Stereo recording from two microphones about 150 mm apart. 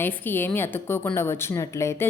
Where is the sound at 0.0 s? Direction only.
15° left (ahead or behind).